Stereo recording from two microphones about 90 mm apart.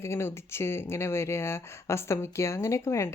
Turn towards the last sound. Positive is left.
turn(degrees=30)  # may be behind; listen again after turning